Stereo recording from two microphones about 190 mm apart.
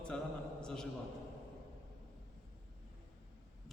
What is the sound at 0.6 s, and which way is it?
Speech, 5° left (ahead or behind).